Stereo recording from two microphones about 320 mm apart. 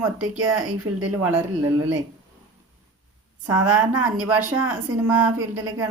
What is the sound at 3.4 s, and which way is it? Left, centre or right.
A woman's voice, centre.